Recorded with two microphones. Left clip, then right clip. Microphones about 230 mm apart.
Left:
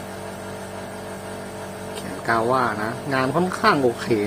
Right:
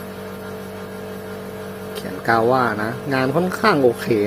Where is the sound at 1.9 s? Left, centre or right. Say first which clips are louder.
Right 4 dB; centre.